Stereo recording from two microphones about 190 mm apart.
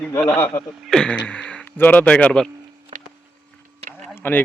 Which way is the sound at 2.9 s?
30° right (ahead or behind).